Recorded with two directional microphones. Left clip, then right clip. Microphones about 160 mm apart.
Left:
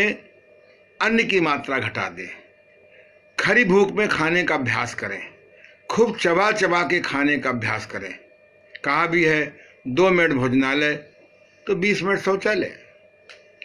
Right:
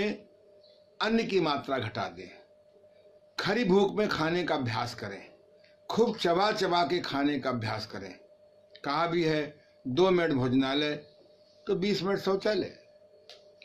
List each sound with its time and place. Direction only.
0.9 s speech: 25° right (ahead or behind)
3.3 s speech: 25° right (ahead or behind)